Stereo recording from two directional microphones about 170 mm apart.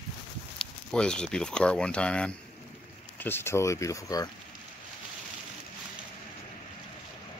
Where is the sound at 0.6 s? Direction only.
5° left (ahead or behind); by 4.3 s 20° left (ahead or behind).